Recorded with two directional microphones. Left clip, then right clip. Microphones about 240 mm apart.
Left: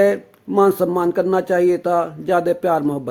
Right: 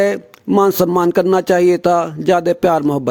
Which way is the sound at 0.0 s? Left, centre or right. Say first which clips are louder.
Even; right.